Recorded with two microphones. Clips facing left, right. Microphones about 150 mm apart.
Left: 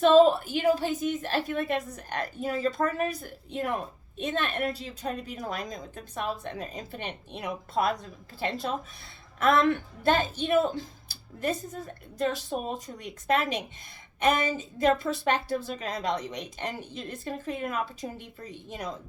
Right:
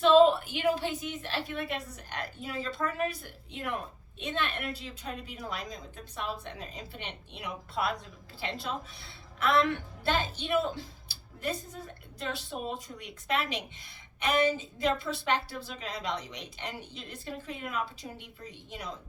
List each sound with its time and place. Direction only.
0.0 s a woman's voice: 40° left (ahead or behind)